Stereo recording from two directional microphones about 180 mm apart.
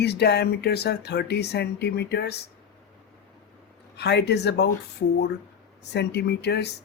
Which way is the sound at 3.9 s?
70° left (ahead or behind).